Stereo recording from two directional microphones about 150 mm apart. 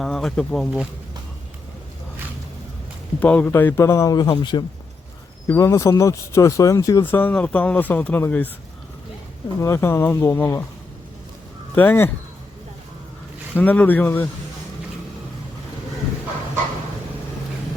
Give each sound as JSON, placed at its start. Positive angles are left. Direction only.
{"t": 0.0, "sound": "speech", "side_deg": 0}
{"t": 3.2, "sound": "speech", "side_deg": 10}
{"t": 9.6, "sound": "speech", "side_deg": 20}
{"t": 11.7, "sound": "speech", "side_deg": 15}
{"t": 13.5, "sound": "speech", "side_deg": 10}